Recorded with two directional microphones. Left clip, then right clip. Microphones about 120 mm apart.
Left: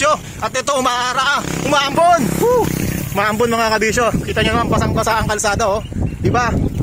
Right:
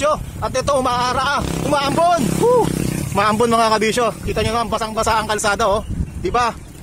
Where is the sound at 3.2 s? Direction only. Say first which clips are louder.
Right 1 dB; 20° right (ahead or behind).